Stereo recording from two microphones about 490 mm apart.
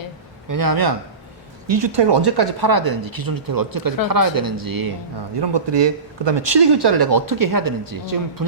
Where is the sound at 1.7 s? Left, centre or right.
Right.